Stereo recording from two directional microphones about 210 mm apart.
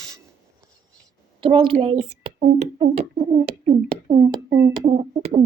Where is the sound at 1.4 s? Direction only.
25° right (ahead or behind).